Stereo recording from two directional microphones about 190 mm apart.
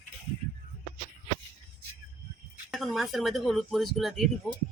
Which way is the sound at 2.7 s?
Centre (ahead or behind).